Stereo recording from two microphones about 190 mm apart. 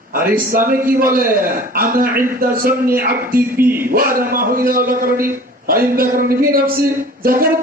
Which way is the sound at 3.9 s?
50° right (ahead or behind).